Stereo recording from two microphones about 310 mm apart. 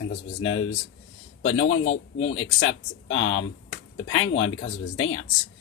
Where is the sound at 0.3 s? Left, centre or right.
Left.